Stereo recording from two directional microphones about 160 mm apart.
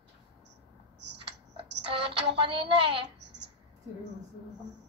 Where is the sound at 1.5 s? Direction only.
35° right (ahead or behind).